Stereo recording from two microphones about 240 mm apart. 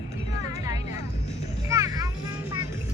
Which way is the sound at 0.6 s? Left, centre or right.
Centre.